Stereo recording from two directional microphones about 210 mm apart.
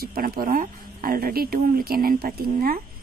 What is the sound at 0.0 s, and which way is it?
Speech, 45° right (ahead or behind).